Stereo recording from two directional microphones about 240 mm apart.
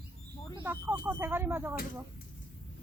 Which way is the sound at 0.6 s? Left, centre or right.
Centre.